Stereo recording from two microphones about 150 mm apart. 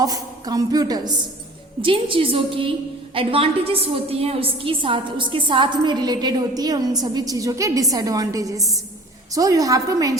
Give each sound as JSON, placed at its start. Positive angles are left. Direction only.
{"t": 0.0, "sound": "a woman's voice", "side_deg": -25}